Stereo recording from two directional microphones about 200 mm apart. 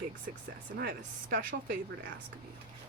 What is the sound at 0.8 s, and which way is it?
Speech, 50° right (ahead or behind).